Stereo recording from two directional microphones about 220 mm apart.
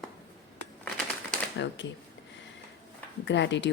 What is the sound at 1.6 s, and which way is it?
Camera, 55° left (ahead or behind).